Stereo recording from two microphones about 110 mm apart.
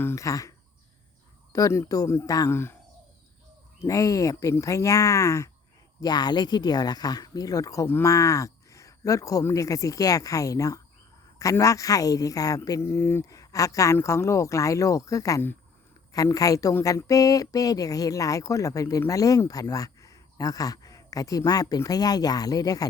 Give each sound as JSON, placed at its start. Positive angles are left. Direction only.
{"t": 0.0, "sound": "speech", "side_deg": 25}
{"t": 1.5, "sound": "speech", "side_deg": 30}
{"t": 3.8, "sound": "speech", "side_deg": 30}
{"t": 6.0, "sound": "speech", "side_deg": 40}
{"t": 12.8, "sound": "speech", "side_deg": 20}